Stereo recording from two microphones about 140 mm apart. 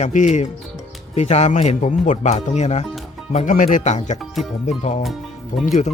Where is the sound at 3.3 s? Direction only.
65° left (ahead or behind).